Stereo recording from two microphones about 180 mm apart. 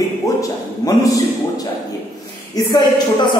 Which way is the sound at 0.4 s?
20° left (ahead or behind).